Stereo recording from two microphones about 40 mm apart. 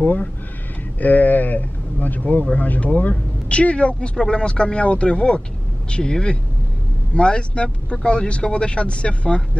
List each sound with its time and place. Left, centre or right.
0.0 s a man's voice: left